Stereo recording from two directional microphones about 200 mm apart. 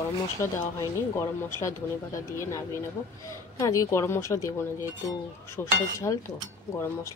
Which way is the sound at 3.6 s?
15° left (ahead or behind).